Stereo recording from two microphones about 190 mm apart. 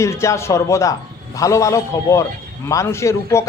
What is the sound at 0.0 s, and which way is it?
A man's voice, 15° left (ahead or behind).